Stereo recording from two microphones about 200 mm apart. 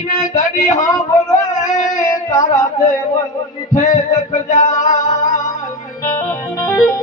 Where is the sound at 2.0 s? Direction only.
20° left (ahead or behind).